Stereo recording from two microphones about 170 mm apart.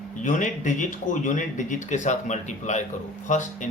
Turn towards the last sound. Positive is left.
turn(degrees=45)  # may be behind; listen again after turning